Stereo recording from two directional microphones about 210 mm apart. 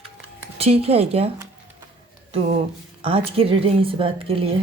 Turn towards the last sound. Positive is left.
turn(degrees=-25)  # may be behind; listen again after turning